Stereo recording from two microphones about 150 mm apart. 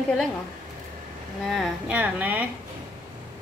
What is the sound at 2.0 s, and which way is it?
Speech, 10° right (ahead or behind).